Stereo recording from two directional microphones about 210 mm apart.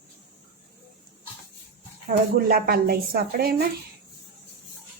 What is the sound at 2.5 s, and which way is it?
A woman's voice, 45° right (ahead or behind).